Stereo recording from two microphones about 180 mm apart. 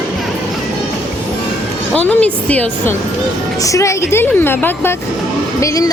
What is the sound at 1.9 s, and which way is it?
A woman's voice, 5° left (ahead or behind).